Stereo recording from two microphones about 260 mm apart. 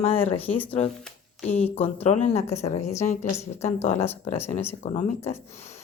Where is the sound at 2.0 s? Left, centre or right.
Left.